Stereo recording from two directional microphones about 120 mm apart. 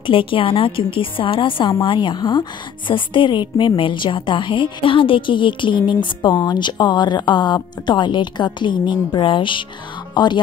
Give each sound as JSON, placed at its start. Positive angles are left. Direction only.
{"t": 0.0, "sound": "a woman's voice", "side_deg": 45}